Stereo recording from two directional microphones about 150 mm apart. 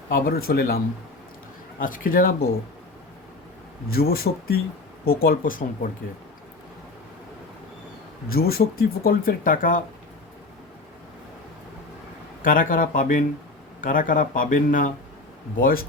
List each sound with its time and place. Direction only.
0.1 s speech: 85° left
1.8 s speech: 65° left (ahead or behind)
3.9 s speech: 90° left
5.0 s speech: 80° left
8.3 s speech: 90° left; by 9.8 s 65° left (ahead or behind)
12.4 s speech: 65° left (ahead or behind)
15.5 s speech: 75° left (ahead or behind)